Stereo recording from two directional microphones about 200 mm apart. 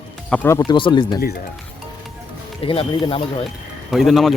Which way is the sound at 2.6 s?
25° left (ahead or behind).